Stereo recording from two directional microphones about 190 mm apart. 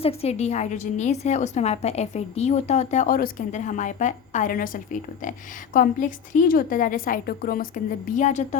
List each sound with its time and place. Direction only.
0.0 s a woman's voice: 30° left (ahead or behind)